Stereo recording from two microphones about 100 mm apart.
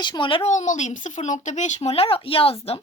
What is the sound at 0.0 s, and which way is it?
Speech, 55° left (ahead or behind).